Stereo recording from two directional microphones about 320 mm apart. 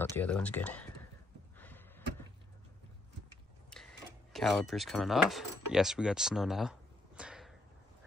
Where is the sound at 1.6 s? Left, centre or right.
Centre.